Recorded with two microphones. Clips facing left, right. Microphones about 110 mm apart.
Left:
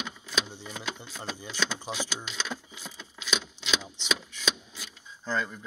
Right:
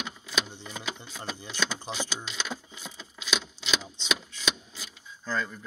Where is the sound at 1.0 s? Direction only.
Centre (ahead or behind).